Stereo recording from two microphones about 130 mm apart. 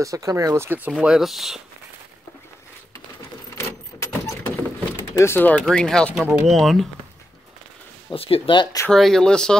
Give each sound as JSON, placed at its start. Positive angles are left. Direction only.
{"t": 0.0, "sound": "speech", "side_deg": -25}
{"t": 3.5, "sound": "vehicle", "side_deg": 20}
{"t": 5.7, "sound": "speech", "side_deg": 5}
{"t": 8.1, "sound": "speech", "side_deg": 45}
{"t": 8.9, "sound": "speech", "side_deg": 5}